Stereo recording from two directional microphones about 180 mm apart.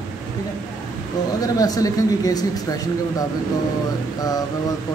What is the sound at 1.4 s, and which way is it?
Speech, 20° left (ahead or behind).